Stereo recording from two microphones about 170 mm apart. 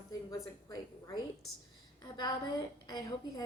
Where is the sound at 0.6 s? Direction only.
25° left (ahead or behind).